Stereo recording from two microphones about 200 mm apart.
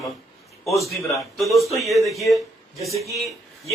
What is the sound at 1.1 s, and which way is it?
Speech, centre (ahead or behind).